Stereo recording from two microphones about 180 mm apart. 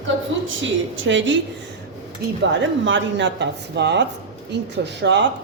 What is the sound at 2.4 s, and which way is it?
Speech, 85° right.